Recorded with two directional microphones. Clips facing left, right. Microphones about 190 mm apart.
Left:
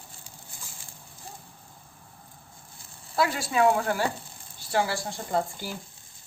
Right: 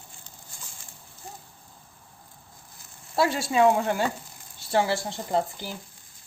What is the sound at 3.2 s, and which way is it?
Speech, 25° right (ahead or behind).